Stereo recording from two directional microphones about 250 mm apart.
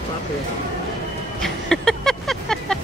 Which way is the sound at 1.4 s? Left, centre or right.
Centre.